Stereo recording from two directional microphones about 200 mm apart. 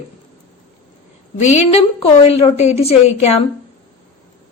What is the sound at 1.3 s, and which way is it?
Speech, 35° left (ahead or behind).